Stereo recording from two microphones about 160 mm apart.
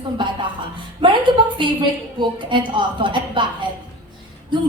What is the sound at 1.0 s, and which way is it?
Speech, 30° right (ahead or behind).